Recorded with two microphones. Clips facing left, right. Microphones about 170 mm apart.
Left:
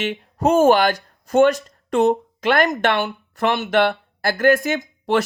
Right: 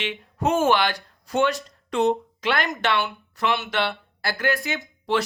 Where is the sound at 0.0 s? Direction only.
40° left (ahead or behind).